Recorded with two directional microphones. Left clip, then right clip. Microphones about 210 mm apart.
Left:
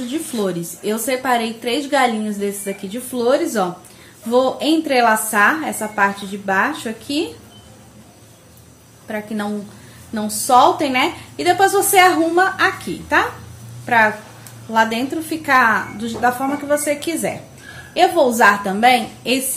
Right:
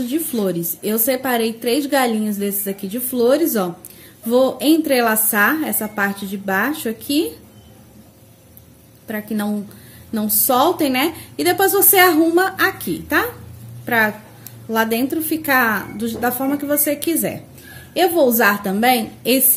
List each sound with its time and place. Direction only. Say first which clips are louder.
0.0 s a woman's voice: right 1 dB; 45° right (ahead or behind)
9.0 s a woman's voice: even; 45° right (ahead or behind)